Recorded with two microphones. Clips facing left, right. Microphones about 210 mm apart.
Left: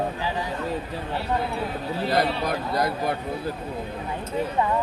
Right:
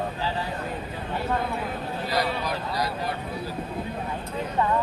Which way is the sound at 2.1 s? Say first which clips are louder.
Left 4 dB; 55° left (ahead or behind).